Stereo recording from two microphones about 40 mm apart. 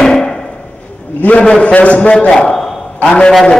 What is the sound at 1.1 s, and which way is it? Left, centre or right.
A man's voice, left.